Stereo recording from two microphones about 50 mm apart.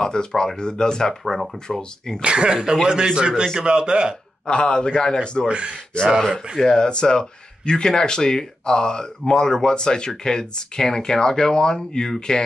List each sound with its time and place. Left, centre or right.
0.0 s speech: centre
1.2 s speech: centre
1.8 s speech: centre
2.2 s a man's voice: centre
4.5 s a man's voice: left
5.5 s speech: right
6.6 s speech: centre